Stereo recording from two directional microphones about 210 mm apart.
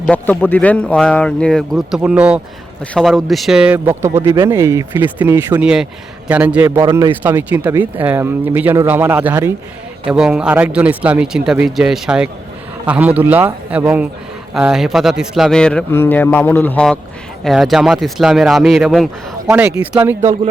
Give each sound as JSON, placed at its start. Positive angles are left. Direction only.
{"t": 0.0, "sound": "speech", "side_deg": 5}